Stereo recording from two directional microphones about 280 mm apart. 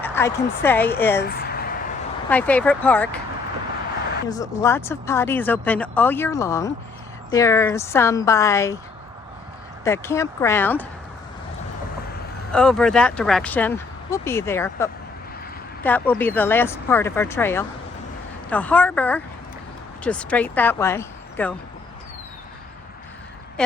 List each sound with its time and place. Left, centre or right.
0.0 s speech: centre
1.2 s a sound: left
2.3 s speech: centre
4.3 s speech: centre
9.8 s speech: centre
12.5 s speech: centre
23.6 s speech: centre